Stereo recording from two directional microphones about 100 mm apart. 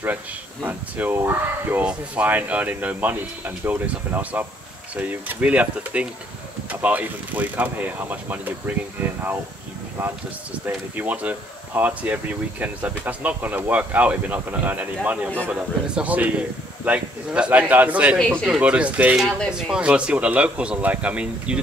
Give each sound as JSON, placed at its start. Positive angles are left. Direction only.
{"t": 0.7, "sound": "speech", "side_deg": -20}
{"t": 10.6, "sound": "speech", "side_deg": -15}
{"t": 19.1, "sound": "speech", "side_deg": 5}
{"t": 19.5, "sound": "speech", "side_deg": -5}